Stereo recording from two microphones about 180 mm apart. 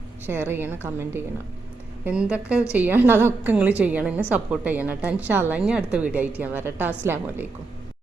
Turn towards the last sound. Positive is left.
turn(degrees=-10)  # may be behind; listen again after turning